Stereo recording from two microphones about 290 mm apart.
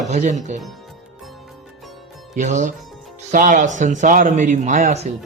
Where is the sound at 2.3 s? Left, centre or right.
Right.